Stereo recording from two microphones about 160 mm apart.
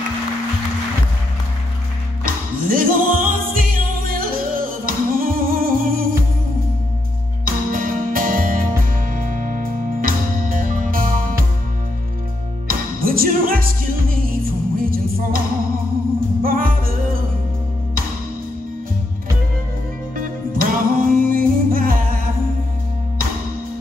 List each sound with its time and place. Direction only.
2.2 s music: 60° right (ahead or behind)
7.4 s music: 60° right (ahead or behind)
12.6 s music: 65° right (ahead or behind)
16.4 s music: 60° right (ahead or behind)
20.2 s music: 60° right (ahead or behind)